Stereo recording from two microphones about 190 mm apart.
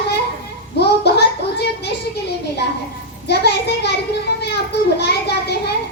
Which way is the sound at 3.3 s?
60° left (ahead or behind).